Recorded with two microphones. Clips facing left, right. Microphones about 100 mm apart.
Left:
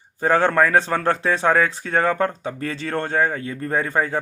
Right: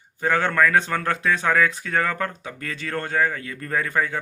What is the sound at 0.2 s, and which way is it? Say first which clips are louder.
Speech: left 3 dB; 35° left (ahead or behind).